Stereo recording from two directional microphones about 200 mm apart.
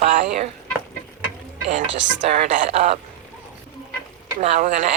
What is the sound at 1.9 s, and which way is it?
Speech, 65° right (ahead or behind).